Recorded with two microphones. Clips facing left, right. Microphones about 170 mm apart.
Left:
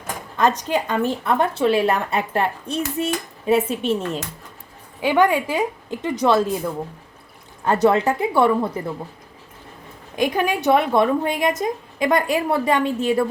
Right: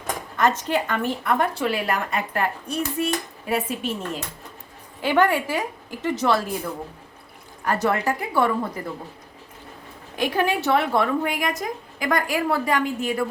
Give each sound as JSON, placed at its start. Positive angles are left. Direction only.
{"t": 0.3, "sound": "a woman's voice", "side_deg": 15}
{"t": 4.9, "sound": "a woman's voice", "side_deg": 15}
{"t": 7.6, "sound": "a woman's voice", "side_deg": 25}
{"t": 10.2, "sound": "a woman's voice", "side_deg": 15}